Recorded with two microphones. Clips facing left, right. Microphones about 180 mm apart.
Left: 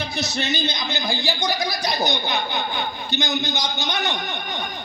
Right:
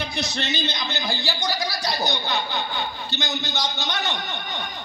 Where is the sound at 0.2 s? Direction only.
10° left (ahead or behind).